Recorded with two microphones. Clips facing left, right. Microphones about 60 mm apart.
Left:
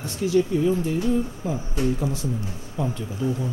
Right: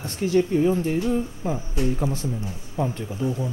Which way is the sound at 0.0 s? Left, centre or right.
Right.